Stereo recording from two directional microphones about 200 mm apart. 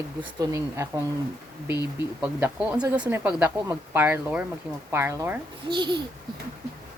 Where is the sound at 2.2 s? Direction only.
5° right (ahead or behind).